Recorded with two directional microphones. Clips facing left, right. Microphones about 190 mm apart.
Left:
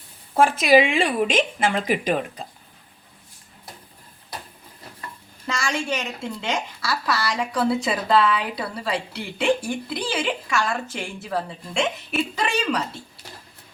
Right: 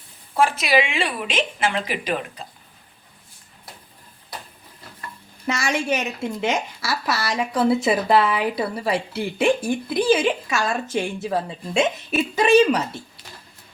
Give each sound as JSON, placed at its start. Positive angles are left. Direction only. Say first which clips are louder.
{"t": 0.3, "sound": "a woman's voice", "louder": "left 3 dB", "side_deg": 50}
{"t": 5.5, "sound": "speech", "louder": "right 3 dB", "side_deg": -20}